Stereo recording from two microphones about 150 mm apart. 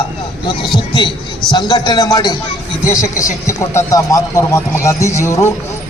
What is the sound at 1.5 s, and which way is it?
Speech, 30° left (ahead or behind).